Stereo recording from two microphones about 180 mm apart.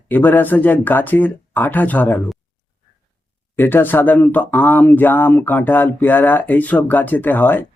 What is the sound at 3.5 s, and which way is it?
Speech, 10° left (ahead or behind).